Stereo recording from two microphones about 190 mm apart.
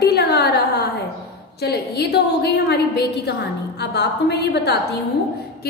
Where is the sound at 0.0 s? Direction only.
60° left (ahead or behind).